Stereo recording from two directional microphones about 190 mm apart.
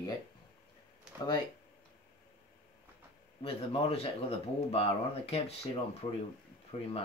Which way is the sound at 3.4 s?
30° left (ahead or behind).